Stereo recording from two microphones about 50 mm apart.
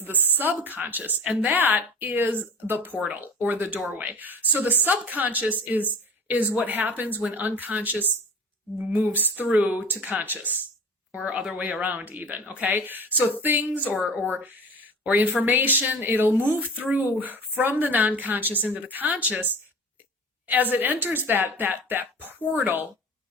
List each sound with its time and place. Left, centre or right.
0.0 s speech: right
9.5 s speech: right
11.1 s speech: right
11.7 s speech: right